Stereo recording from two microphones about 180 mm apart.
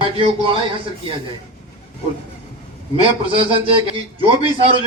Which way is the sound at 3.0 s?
30° right (ahead or behind).